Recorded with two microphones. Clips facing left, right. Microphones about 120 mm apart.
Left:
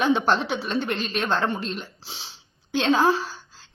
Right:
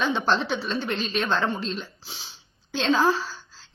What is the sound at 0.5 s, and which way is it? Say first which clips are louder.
Speech: left 1 dB; 15° left (ahead or behind).